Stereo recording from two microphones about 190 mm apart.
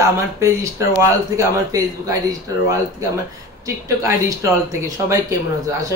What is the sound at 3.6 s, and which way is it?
Speech, 15° right (ahead or behind).